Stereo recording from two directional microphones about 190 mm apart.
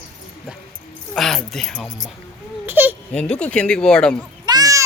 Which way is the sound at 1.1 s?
Centre (ahead or behind).